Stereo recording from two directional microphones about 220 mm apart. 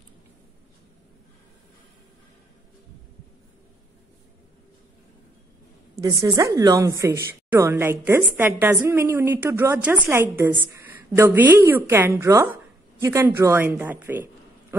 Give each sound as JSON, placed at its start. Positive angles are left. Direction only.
{"t": 5.9, "sound": "a woman's voice", "side_deg": -15}